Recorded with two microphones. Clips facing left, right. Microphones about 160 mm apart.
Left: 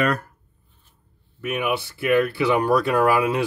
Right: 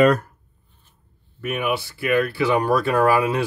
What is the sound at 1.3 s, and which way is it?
Speech, 15° left (ahead or behind).